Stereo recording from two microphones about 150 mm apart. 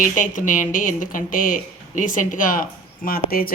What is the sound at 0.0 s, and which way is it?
Speech, 60° left (ahead or behind).